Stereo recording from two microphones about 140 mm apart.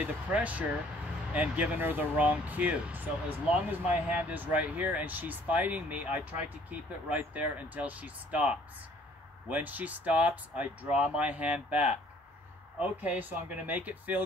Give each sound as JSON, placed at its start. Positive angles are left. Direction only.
{"t": 0.0, "sound": "speech", "side_deg": -10}